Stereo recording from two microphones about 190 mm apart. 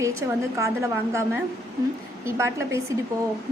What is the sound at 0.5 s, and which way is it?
Speech, 15° right (ahead or behind).